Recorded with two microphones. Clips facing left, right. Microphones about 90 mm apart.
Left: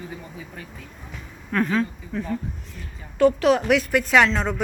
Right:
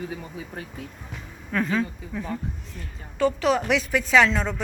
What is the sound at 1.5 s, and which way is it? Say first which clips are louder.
A woman's voice: left 2 dB; centre (ahead or behind).